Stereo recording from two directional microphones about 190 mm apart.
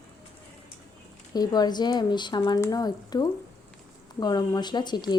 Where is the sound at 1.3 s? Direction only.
20° left (ahead or behind).